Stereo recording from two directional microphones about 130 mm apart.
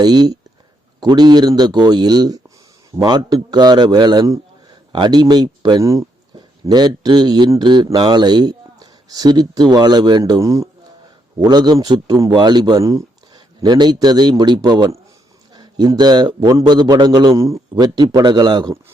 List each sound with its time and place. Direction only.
0.0 s speech: 30° right (ahead or behind)
17.3 s a man's voice: 25° right (ahead or behind)